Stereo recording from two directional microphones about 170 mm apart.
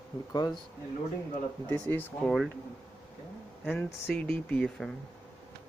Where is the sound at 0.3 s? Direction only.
25° left (ahead or behind).